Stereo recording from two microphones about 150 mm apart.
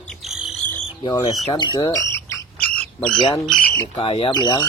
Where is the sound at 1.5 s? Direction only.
30° left (ahead or behind); by 3.3 s 5° left (ahead or behind).